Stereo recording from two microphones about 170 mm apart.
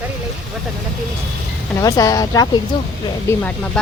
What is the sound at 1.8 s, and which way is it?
Speech, 20° left (ahead or behind).